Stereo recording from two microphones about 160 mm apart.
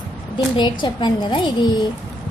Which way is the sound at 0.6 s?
30° left (ahead or behind).